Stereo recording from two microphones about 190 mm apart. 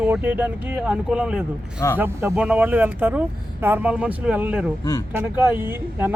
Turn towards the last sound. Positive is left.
turn(degrees=-10)  # may be behind; listen again after turning